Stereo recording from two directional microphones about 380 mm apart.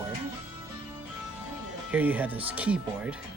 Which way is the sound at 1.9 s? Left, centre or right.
Centre.